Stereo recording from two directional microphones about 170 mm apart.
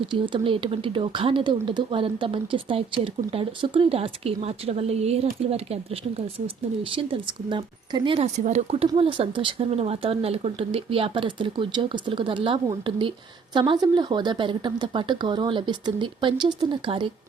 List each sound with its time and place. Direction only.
0.0 s a woman's voice: 30° right (ahead or behind)